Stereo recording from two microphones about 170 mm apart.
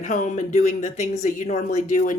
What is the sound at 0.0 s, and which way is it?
Speech, 50° left (ahead or behind).